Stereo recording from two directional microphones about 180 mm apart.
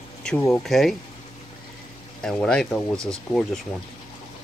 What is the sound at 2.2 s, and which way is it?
Speech, 5° left (ahead or behind).